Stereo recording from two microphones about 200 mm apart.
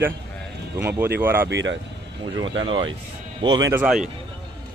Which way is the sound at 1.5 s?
65° right (ahead or behind).